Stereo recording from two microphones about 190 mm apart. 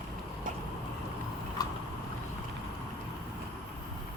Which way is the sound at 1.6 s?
20° left (ahead or behind).